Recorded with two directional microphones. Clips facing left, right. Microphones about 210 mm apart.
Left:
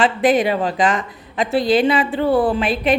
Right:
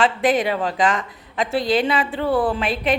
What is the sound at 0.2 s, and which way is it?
A woman's voice, 10° left (ahead or behind).